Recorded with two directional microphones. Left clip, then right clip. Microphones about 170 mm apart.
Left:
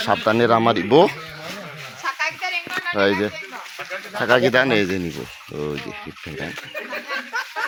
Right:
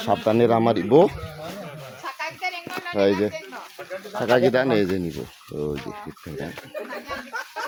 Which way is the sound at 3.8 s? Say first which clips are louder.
Left 5 dB; 30° right (ahead or behind).